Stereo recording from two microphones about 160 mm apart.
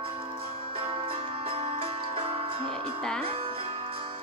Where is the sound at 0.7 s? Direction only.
35° right (ahead or behind).